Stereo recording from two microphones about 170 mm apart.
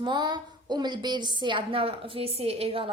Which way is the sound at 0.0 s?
25° right (ahead or behind).